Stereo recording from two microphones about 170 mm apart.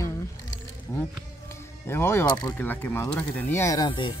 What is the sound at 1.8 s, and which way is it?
Speech, 15° left (ahead or behind).